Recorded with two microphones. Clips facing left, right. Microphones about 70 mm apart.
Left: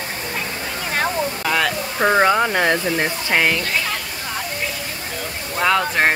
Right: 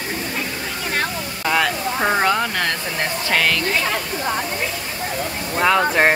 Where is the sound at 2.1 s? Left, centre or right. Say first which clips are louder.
Left 3 dB; centre.